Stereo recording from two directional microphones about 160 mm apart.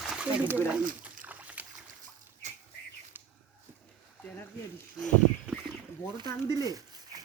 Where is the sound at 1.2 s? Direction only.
10° right (ahead or behind).